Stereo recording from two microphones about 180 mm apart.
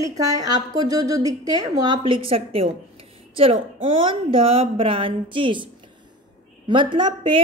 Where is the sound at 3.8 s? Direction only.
30° right (ahead or behind).